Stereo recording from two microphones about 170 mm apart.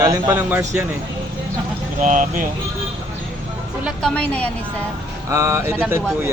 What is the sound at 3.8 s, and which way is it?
Speech, 5° left (ahead or behind).